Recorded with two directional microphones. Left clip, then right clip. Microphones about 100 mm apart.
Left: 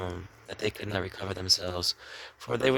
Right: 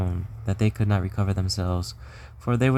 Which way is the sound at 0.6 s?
25° left (ahead or behind).